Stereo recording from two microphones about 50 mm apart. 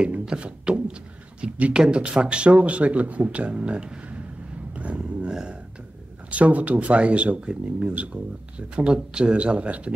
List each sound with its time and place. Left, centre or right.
0.0 s speech: centre